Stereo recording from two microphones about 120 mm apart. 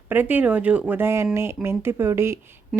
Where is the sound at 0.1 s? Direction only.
15° right (ahead or behind).